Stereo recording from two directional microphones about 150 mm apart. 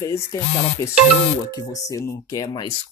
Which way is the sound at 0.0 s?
20° left (ahead or behind).